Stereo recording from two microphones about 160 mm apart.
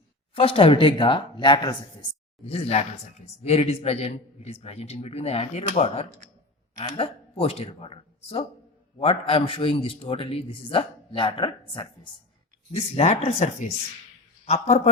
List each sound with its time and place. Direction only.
0.3 s speech: 35° left (ahead or behind)
2.5 s speech: 40° left (ahead or behind)